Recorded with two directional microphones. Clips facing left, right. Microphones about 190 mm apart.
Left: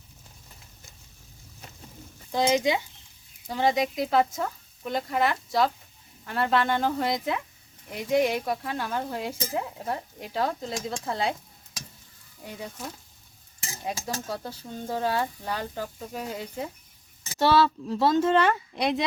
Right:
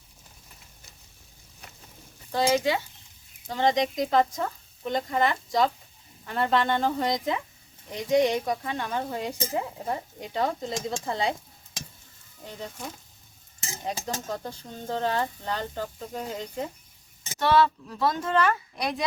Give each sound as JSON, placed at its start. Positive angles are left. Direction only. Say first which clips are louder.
{"t": 2.3, "sound": "speech", "louder": "even", "side_deg": 20}
{"t": 12.4, "sound": "speech", "louder": "even", "side_deg": 10}
{"t": 14.3, "sound": "speech", "louder": "even", "side_deg": 5}
{"t": 17.3, "sound": "speech", "louder": "left 1 dB", "side_deg": 30}